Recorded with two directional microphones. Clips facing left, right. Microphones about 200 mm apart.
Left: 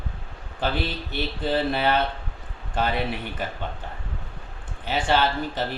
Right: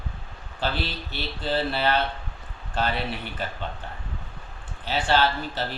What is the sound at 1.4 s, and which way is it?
Speech, 15° left (ahead or behind).